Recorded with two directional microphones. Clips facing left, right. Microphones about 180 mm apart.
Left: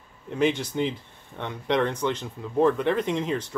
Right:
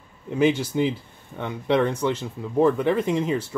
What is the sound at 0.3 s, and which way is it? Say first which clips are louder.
Speech: right 3 dB; 5° right (ahead or behind).